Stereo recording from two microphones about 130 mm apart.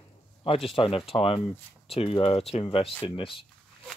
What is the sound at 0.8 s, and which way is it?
Speech, 45° left (ahead or behind).